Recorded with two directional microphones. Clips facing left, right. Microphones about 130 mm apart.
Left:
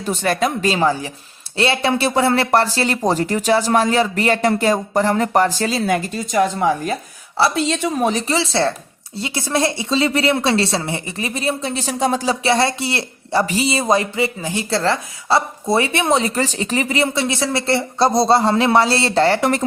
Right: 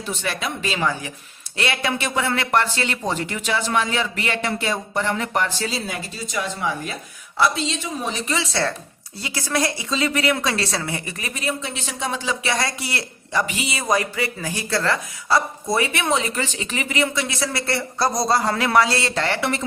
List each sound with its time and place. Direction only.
0.0 s speech: 45° left (ahead or behind)
5.6 s speech: 60° left (ahead or behind)
8.2 s speech: 30° left (ahead or behind)